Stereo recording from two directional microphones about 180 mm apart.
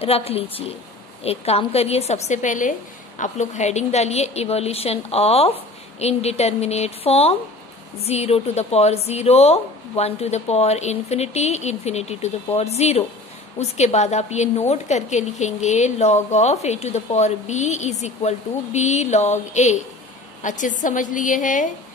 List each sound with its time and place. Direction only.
0.0 s a woman's voice: 35° left (ahead or behind)